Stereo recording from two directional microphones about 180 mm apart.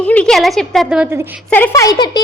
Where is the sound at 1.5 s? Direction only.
10° left (ahead or behind).